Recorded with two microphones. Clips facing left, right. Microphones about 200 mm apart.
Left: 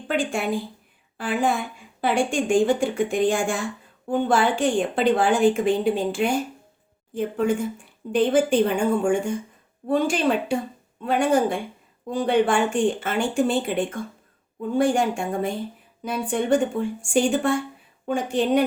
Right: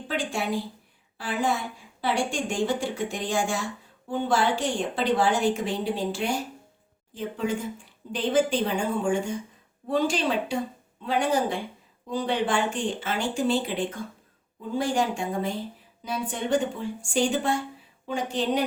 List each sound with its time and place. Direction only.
0.1 s a woman's voice: 55° left (ahead or behind)